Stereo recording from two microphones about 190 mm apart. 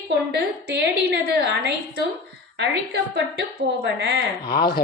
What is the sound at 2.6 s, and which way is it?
A woman's voice, 60° right (ahead or behind).